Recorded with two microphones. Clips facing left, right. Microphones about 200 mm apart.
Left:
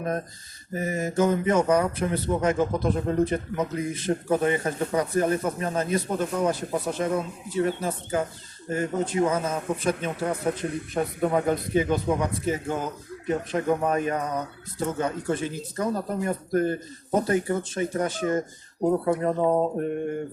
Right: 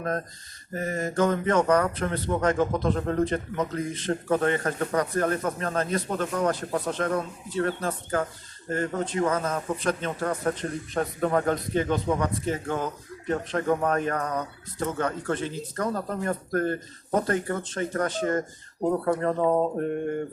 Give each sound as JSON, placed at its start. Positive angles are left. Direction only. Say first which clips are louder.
{"t": 0.7, "sound": "speech", "louder": "left 1 dB", "side_deg": 10}